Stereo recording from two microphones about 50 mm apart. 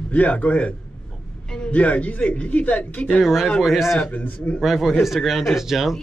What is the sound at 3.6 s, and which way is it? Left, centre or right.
Speech, centre.